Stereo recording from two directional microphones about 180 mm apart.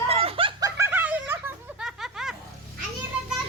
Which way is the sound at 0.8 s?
10° right (ahead or behind).